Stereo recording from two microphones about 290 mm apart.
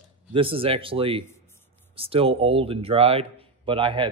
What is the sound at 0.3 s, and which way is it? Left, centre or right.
A man's voice, centre.